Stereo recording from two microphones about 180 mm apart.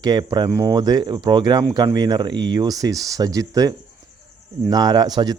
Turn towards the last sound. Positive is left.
turn(degrees=-20)  # may be behind; listen again after turning